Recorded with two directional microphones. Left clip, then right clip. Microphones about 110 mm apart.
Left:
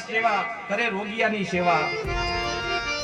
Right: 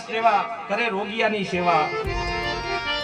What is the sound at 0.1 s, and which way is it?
A man's voice, 40° right (ahead or behind).